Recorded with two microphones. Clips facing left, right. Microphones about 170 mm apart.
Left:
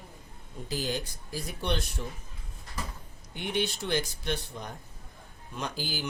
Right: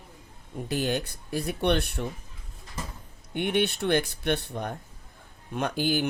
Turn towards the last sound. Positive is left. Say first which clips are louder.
# right 9 dB
turn(degrees=-60)  # may be behind; listen again after turning